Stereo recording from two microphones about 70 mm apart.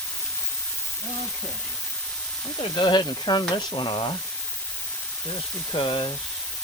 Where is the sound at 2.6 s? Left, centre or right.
Left.